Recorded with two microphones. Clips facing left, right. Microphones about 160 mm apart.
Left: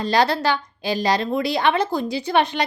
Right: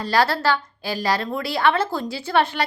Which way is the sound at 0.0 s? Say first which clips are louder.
Left 1 dB; 20° left (ahead or behind).